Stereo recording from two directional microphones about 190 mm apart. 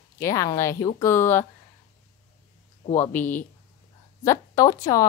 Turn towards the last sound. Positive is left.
turn(degrees=15)  # may be behind; listen again after turning